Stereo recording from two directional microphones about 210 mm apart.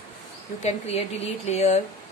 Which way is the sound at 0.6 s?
30° left (ahead or behind).